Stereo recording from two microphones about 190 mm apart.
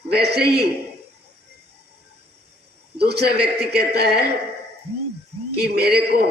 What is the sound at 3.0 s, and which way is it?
Speech, 60° right (ahead or behind).